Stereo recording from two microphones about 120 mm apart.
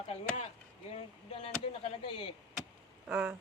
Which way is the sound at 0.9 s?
50° left (ahead or behind).